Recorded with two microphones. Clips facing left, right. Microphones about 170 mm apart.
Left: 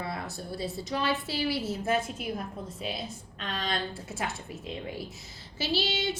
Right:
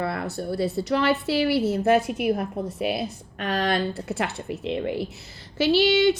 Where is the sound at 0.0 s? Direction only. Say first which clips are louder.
Right 8 dB; 65° right (ahead or behind).